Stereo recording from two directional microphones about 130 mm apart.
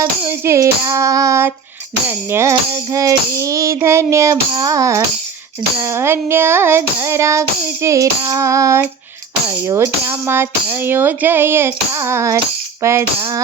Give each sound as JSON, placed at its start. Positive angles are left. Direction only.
{"t": 0.3, "sound": "child singing", "side_deg": -20}